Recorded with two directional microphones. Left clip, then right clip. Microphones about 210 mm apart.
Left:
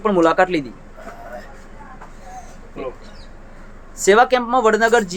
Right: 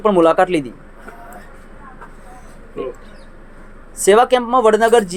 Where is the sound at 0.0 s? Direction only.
10° right (ahead or behind).